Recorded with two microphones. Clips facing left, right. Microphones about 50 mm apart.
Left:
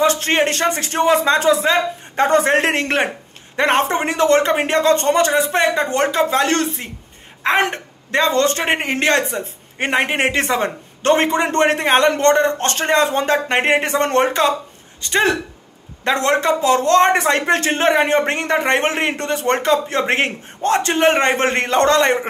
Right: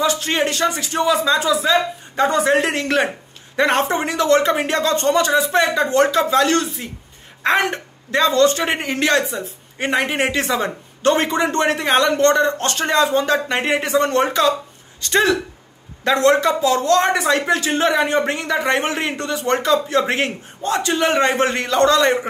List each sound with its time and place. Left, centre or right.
0.0 s speech: left
15.0 s speech: left